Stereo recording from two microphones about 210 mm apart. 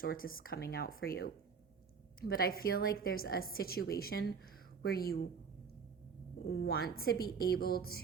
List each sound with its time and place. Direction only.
0.0 s a woman's voice: 45° left (ahead or behind)
6.5 s a woman's voice: 50° left (ahead or behind)